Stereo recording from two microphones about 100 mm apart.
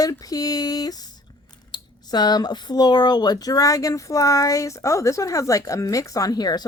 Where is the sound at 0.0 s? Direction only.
35° left (ahead or behind).